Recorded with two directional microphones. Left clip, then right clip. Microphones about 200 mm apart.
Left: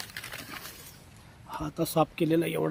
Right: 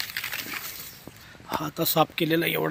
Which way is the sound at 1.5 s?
5° right (ahead or behind).